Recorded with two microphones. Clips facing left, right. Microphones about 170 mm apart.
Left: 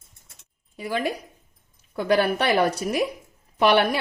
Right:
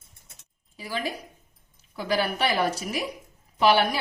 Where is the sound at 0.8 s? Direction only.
55° left (ahead or behind).